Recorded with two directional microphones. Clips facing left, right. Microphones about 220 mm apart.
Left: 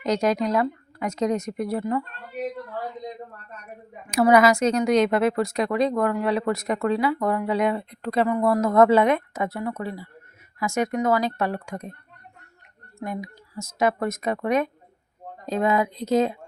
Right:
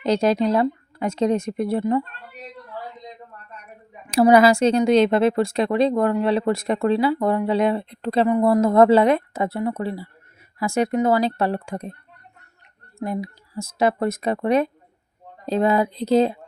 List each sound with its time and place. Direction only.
0.0 s a woman's voice: 30° right (ahead or behind)
4.1 s a woman's voice: 30° right (ahead or behind)
13.0 s speech: 30° right (ahead or behind)